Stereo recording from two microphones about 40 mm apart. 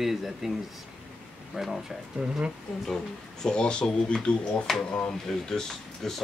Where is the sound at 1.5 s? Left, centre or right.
Centre.